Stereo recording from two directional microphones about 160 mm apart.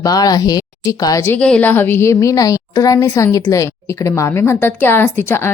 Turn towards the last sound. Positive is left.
turn(degrees=15)  # may be behind; listen again after turning